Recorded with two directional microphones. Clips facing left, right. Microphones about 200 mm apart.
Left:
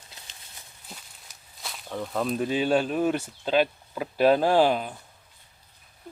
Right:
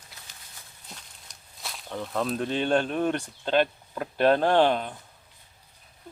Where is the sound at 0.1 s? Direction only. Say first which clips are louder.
Left 1 dB; 20° left (ahead or behind).